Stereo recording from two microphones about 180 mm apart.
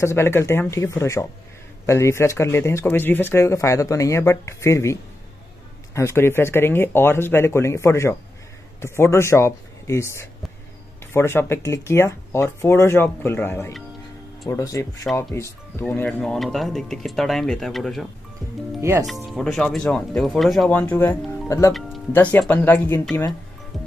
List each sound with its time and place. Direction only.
0.0 s speech: 15° left (ahead or behind)
5.9 s speech: 15° left (ahead or behind)
18.8 s speech: 15° right (ahead or behind)
19.0 s speech: centre (ahead or behind)